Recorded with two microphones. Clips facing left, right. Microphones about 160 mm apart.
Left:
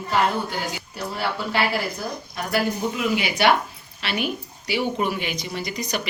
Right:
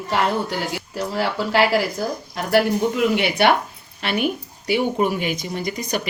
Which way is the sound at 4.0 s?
50° right (ahead or behind).